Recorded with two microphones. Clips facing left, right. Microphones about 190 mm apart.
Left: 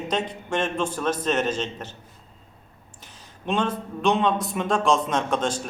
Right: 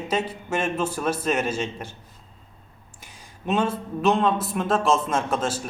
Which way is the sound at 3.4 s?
5° right (ahead or behind).